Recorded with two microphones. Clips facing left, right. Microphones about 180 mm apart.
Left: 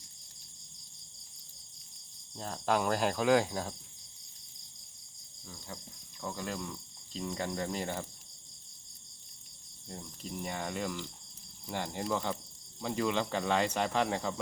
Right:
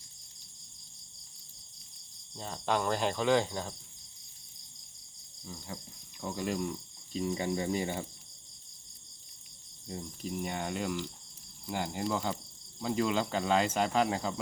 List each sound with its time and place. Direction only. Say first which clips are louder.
2.3 s speech: left 1 dB; centre (ahead or behind)
6.1 s cricket: right 4 dB; 15° right (ahead or behind)
9.8 s speech: right 5 dB; 5° right (ahead or behind)